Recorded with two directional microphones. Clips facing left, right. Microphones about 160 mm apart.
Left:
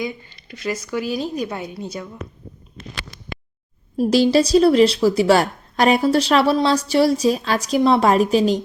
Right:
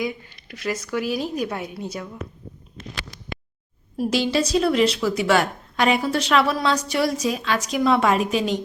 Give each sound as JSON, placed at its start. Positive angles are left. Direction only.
{"t": 0.0, "sound": "speech", "side_deg": 0}
{"t": 3.9, "sound": "speech", "side_deg": 35}